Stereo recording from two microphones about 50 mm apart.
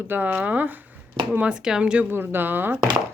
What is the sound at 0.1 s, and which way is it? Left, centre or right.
Speech, right.